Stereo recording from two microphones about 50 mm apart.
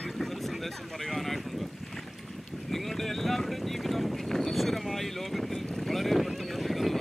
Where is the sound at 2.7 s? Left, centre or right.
Centre.